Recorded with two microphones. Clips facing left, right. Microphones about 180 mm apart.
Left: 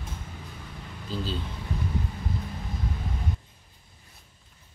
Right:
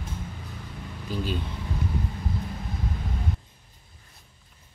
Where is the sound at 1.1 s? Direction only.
15° right (ahead or behind).